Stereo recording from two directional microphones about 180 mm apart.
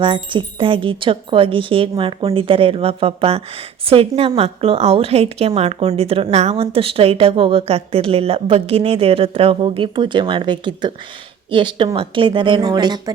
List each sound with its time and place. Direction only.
0.0 s a woman's voice: 25° right (ahead or behind)